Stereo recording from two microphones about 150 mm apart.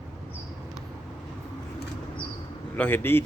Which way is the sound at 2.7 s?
10° left (ahead or behind).